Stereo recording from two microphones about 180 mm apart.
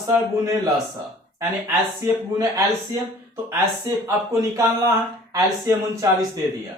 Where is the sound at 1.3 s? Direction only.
20° right (ahead or behind).